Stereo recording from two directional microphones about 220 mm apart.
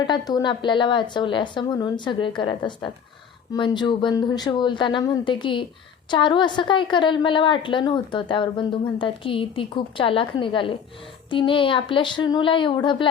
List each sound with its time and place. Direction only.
0.1 s a woman's voice: 20° left (ahead or behind)